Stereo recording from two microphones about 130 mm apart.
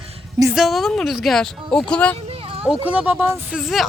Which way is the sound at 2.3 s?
45° right (ahead or behind).